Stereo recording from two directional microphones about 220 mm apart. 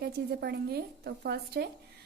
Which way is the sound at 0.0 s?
50° right (ahead or behind).